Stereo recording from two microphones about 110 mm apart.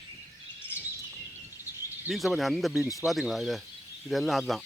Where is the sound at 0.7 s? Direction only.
20° right (ahead or behind).